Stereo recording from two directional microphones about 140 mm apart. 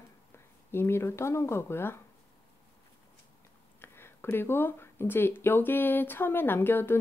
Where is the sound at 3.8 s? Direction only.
15° left (ahead or behind).